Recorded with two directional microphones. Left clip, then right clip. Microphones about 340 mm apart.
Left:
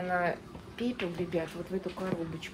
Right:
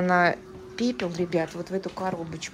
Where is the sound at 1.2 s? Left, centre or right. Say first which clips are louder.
Right 7 dB; centre.